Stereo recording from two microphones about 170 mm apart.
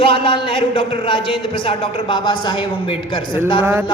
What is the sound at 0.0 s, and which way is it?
Speech, 30° left (ahead or behind).